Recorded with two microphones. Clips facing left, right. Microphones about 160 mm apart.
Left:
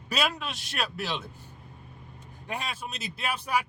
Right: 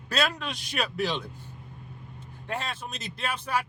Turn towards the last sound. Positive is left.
turn(degrees=10)  # may be behind; listen again after turning